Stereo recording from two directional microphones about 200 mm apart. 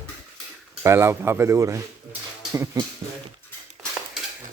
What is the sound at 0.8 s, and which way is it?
Speech, 15° right (ahead or behind).